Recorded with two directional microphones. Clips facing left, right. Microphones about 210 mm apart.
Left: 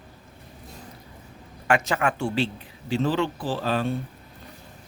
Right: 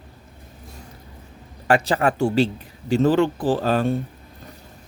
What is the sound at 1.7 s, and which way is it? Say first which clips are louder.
Speech: right 4 dB; 35° right (ahead or behind).